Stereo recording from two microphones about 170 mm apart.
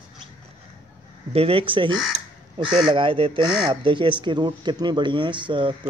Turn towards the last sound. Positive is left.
turn(degrees=-30)  # may be behind; listen again after turning